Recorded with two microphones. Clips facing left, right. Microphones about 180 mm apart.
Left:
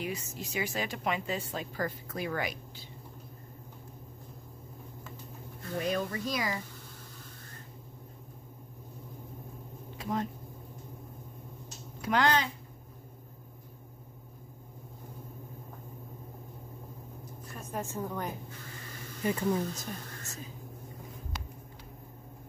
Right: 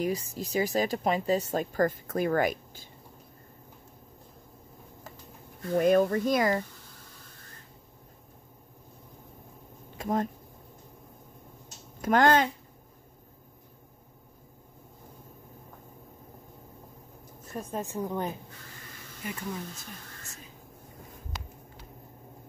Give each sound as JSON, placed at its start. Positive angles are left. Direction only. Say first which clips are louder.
{"t": 0.0, "sound": "speech", "louder": "right 7 dB", "side_deg": -35}
{"t": 5.8, "sound": "speech", "louder": "right 10 dB", "side_deg": -50}
{"t": 9.9, "sound": "a sound", "louder": "right 5 dB", "side_deg": -45}
{"t": 12.0, "sound": "speech", "louder": "right 5 dB", "side_deg": -45}
{"t": 17.7, "sound": "a woman's voice", "louder": "right 3 dB", "side_deg": -15}
{"t": 19.2, "sound": "speech", "louder": "left 7 dB", "side_deg": 40}